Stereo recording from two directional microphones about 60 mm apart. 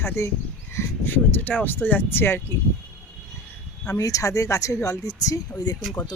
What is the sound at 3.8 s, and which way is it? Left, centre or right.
Speech, left.